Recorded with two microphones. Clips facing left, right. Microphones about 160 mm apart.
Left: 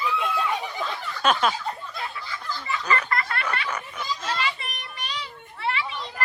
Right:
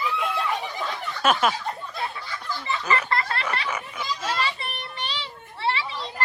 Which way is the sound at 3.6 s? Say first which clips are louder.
Right 1 dB; 10° right (ahead or behind).